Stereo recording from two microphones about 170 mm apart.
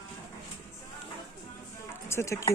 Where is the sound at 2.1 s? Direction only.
15° left (ahead or behind).